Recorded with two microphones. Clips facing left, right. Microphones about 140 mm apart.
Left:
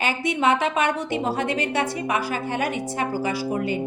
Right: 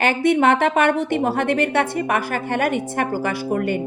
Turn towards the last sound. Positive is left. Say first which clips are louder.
# right 3 dB
turn(degrees=-60)  # may be behind; listen again after turning